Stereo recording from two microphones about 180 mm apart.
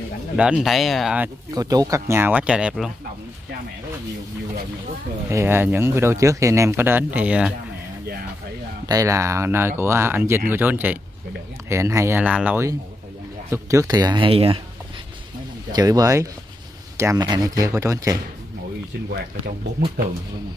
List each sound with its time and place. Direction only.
0.4 s speech: 5° right (ahead or behind)
1.5 s speech: 20° right (ahead or behind); by 2.9 s 5° right (ahead or behind)
5.3 s speech: 15° right (ahead or behind)
8.8 s speech: 20° right (ahead or behind)
15.7 s speech: 20° right (ahead or behind)